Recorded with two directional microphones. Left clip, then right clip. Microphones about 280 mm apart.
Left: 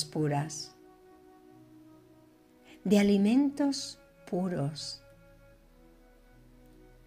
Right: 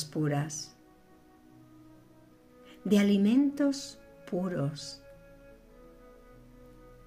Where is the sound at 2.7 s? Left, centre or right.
Centre.